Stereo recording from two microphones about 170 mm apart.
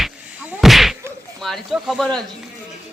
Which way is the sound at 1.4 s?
Centre (ahead or behind).